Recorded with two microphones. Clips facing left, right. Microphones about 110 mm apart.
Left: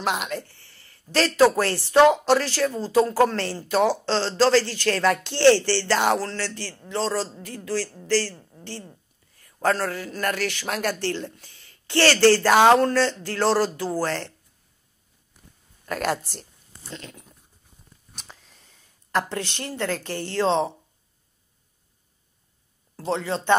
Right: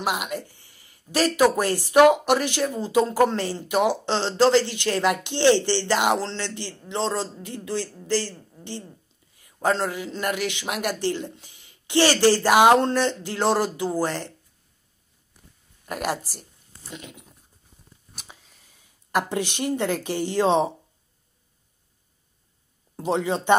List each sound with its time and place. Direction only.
0.0 s a sound: 10° right (ahead or behind)
1.1 s a woman's voice: 10° right (ahead or behind)
15.8 s speech: 10° right (ahead or behind)
18.1 s a sound: 5° right (ahead or behind)
19.1 s speech: 15° right (ahead or behind)
22.9 s speech: 15° right (ahead or behind)